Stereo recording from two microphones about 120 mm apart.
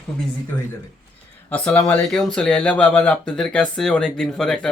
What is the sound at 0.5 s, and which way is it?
Speech, 15° left (ahead or behind).